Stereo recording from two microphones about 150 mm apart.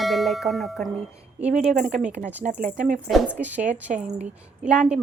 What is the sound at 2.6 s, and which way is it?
Speech, 60° right (ahead or behind).